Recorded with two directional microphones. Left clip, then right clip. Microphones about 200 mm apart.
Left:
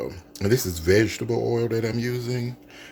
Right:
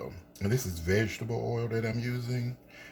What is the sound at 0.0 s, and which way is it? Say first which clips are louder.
Speech: left 9 dB; 55° left (ahead or behind).